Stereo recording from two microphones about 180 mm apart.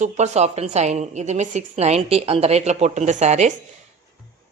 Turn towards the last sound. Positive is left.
turn(degrees=-40)  # may be behind; listen again after turning